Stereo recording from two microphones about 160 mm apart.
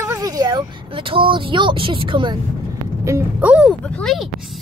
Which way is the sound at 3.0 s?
10° right (ahead or behind).